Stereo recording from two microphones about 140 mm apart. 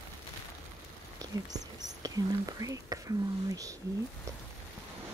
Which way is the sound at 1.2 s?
25° right (ahead or behind).